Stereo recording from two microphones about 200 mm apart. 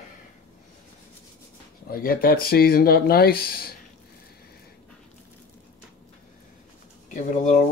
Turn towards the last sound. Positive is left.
turn(degrees=40)  # may be behind; listen again after turning